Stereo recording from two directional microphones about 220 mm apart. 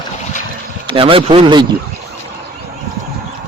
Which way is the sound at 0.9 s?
25° right (ahead or behind).